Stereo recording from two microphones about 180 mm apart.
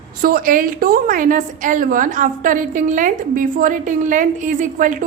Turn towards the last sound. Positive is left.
turn(degrees=-45)  # may be behind; listen again after turning